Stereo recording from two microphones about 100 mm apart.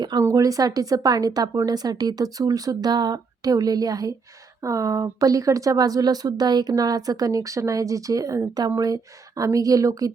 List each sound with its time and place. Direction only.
0.2 s a woman's voice: 35° right (ahead or behind)